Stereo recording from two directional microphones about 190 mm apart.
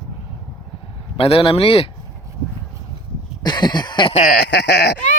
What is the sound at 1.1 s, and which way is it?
Speech, 30° left (ahead or behind).